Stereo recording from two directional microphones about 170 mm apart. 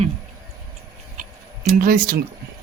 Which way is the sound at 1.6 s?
55° right (ahead or behind).